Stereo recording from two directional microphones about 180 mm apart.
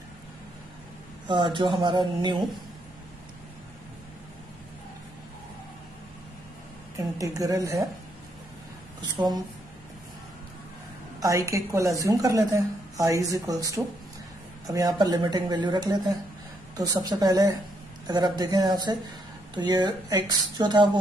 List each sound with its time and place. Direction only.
1.2 s a woman's voice: 25° right (ahead or behind)
7.0 s a woman's voice: 20° right (ahead or behind)
11.1 s a woman's voice: 15° right (ahead or behind)